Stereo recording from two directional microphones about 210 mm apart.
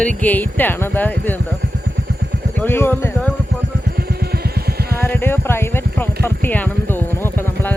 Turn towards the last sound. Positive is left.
turn(degrees=10)  # may be behind; listen again after turning